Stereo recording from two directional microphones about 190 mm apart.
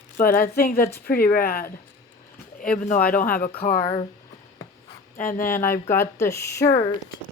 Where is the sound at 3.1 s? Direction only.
50° left (ahead or behind).